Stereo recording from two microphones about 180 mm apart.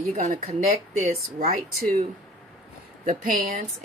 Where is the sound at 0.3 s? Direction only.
35° right (ahead or behind).